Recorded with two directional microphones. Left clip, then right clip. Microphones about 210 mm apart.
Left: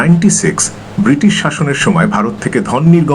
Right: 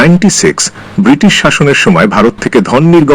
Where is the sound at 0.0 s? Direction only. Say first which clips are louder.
Right 6 dB; 50° right (ahead or behind).